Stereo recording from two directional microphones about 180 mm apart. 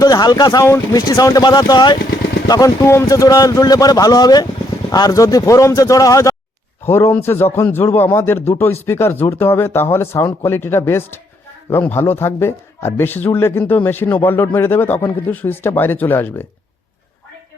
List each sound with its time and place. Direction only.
0.0 s a man's voice: 20° left (ahead or behind)